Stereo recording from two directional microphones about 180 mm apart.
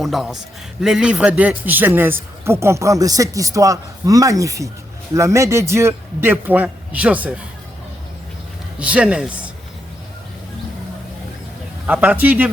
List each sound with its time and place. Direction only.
0.0 s a man's voice: centre (ahead or behind)
8.8 s a man's voice: 5° right (ahead or behind)
11.9 s a man's voice: 10° right (ahead or behind)